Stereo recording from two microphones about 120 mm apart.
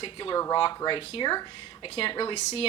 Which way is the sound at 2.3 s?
60° left (ahead or behind).